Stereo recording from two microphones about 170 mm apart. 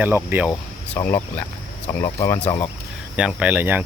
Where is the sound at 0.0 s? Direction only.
10° right (ahead or behind).